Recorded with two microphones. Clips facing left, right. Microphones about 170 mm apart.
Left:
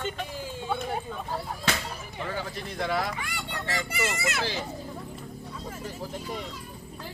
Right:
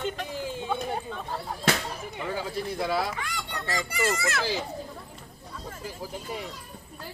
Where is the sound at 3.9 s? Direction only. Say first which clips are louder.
Right 5 dB; 20° left (ahead or behind).